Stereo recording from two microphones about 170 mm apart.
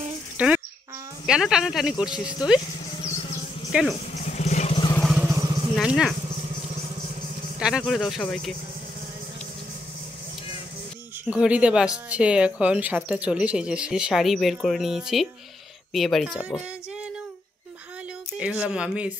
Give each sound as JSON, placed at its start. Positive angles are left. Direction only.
{"t": 0.4, "sound": "speech", "side_deg": -10}
{"t": 3.7, "sound": "speech", "side_deg": -5}
{"t": 4.1, "sound": "vehicle", "side_deg": 45}
{"t": 5.3, "sound": "vehicle", "side_deg": -20}
{"t": 5.8, "sound": "speech", "side_deg": 0}
{"t": 7.5, "sound": "speech", "side_deg": -5}
{"t": 11.2, "sound": "speech", "side_deg": -5}
{"t": 18.4, "sound": "speech", "side_deg": -5}